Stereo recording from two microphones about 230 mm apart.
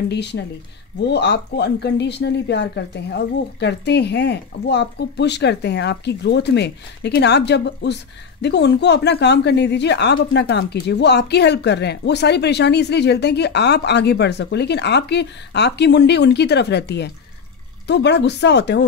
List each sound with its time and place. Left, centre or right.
0.1 s speech: left